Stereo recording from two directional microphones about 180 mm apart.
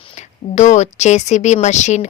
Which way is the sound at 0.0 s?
40° left (ahead or behind).